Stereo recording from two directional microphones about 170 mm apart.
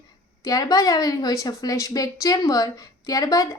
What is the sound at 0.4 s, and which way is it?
A woman's voice, 20° left (ahead or behind).